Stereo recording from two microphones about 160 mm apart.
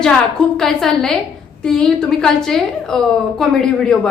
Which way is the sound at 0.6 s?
Centre (ahead or behind).